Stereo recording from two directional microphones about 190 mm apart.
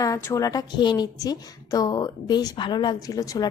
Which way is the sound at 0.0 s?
15° left (ahead or behind).